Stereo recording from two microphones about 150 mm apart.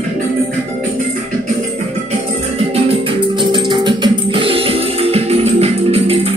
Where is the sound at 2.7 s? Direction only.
35° right (ahead or behind).